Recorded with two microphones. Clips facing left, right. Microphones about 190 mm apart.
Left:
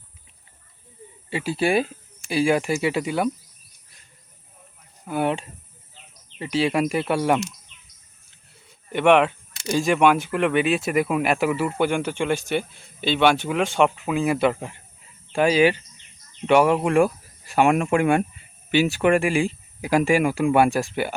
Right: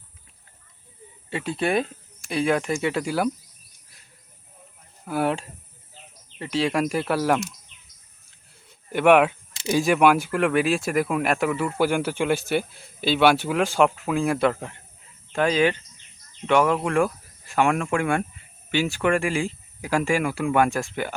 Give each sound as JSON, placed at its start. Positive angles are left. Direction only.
{"t": 1.3, "sound": "speech", "side_deg": 5}
{"t": 5.0, "sound": "speech", "side_deg": 0}
{"t": 8.9, "sound": "speech", "side_deg": -5}